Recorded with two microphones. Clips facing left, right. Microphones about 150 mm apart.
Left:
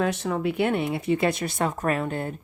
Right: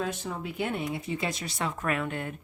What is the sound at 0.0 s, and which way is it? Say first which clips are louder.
A woman's voice: left 8 dB; 75° left (ahead or behind).